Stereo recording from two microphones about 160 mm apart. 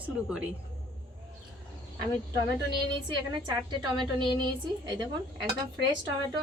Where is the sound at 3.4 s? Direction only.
30° right (ahead or behind).